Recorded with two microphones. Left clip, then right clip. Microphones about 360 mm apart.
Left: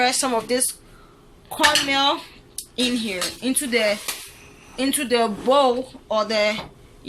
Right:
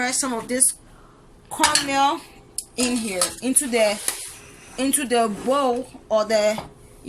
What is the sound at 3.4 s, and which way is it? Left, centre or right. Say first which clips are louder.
A woman's voice: even; centre.